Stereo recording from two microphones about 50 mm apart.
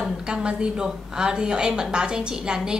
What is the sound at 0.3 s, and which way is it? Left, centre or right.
A woman's voice, centre.